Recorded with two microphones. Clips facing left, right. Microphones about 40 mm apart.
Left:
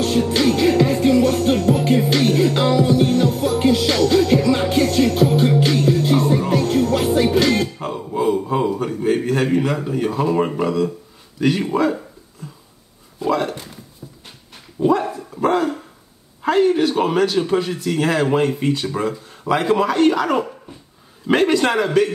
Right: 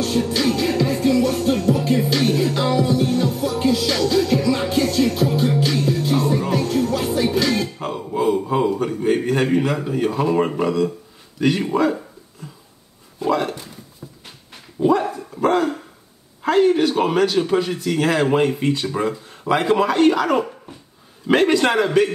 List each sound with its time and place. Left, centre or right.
0.0 s music: left
7.8 s a sound: centre
11.3 s speech: centre
13.2 s a sound: centre
14.8 s dog: centre
16.4 s speech: centre
18.6 s speech: centre